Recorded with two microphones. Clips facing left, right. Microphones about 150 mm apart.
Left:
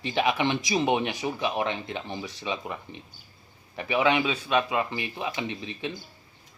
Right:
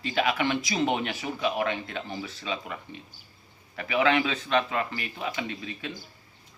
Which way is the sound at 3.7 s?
25° left (ahead or behind).